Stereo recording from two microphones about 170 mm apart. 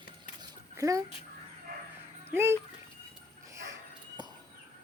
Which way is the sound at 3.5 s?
20° right (ahead or behind).